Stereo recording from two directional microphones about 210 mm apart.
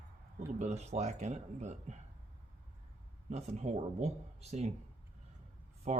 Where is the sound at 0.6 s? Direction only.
30° right (ahead or behind).